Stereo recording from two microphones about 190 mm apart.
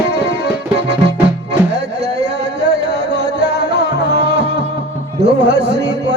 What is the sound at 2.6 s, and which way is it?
Music, 65° right (ahead or behind).